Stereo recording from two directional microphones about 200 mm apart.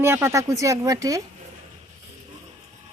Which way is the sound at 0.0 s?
10° right (ahead or behind).